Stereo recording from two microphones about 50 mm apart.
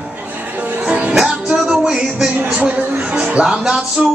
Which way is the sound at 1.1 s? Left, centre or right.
Centre.